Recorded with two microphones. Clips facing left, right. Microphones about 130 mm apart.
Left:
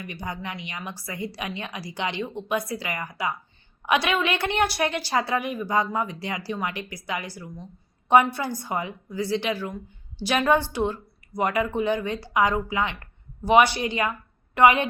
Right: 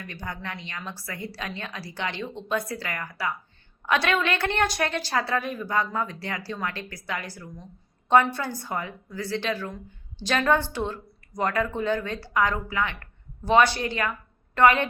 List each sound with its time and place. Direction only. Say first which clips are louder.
0.0 s a woman's voice: left 2 dB; 15° left (ahead or behind)